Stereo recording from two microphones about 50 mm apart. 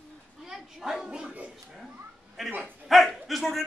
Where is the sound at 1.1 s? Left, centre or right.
Centre.